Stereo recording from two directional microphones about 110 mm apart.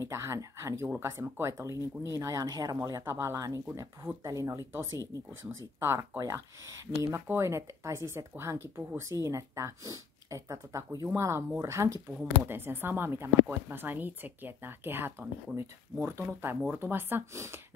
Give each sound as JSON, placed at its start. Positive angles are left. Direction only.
{"t": 0.0, "sound": "speech", "side_deg": -25}